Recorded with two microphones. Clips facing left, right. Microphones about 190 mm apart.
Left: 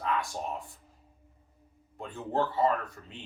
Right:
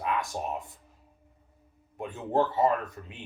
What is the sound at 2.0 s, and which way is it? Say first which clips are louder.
Speech: right 4 dB; 15° right (ahead or behind).